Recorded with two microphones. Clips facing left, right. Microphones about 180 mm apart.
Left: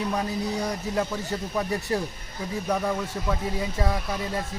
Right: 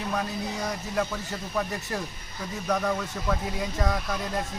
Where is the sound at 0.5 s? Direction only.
35° left (ahead or behind).